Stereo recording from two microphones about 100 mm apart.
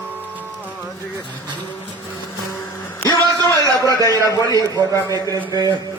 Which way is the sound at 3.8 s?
35° left (ahead or behind).